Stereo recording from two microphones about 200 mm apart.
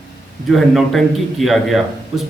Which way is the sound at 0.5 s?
Centre (ahead or behind).